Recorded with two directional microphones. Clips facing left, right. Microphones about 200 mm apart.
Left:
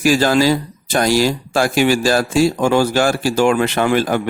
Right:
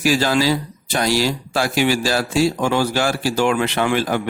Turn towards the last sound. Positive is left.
turn(degrees=45)  # may be behind; listen again after turning